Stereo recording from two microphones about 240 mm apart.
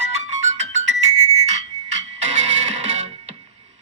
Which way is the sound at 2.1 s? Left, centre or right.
Right.